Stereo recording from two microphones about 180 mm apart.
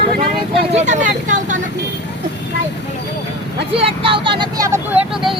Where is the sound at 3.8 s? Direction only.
30° right (ahead or behind).